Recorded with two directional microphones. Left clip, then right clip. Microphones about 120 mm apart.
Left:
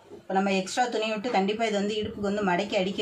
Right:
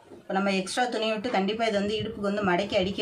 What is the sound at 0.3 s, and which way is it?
Speech, 35° right (ahead or behind).